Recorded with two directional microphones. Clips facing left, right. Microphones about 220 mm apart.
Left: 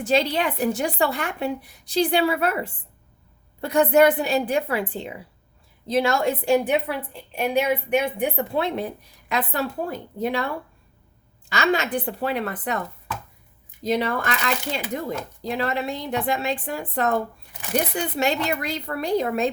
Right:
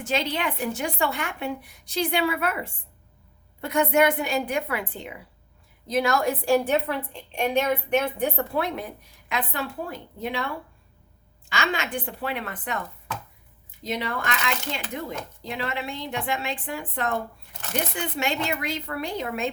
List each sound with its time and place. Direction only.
0.0 s a woman's voice: 35° left (ahead or behind); by 8.4 s 15° left (ahead or behind)
8.5 s speech: 30° left (ahead or behind)
9.3 s a woman's voice: 40° left (ahead or behind)
11.4 s a woman's voice: 40° left (ahead or behind)
13.8 s a woman's voice: 40° left (ahead or behind)